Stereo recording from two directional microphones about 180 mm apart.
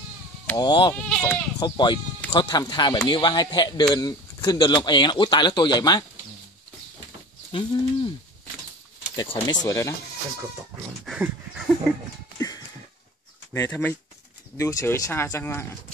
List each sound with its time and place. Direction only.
0.6 s speech: 25° left (ahead or behind)
0.9 s speech: 5° left (ahead or behind)
1.6 s speech: 25° left (ahead or behind)
7.5 s speech: 25° left (ahead or behind)
9.1 s speech: 25° left (ahead or behind)
11.1 s dog: 5° right (ahead or behind)
12.4 s a sound: 20° left (ahead or behind)
13.5 s speech: 10° left (ahead or behind)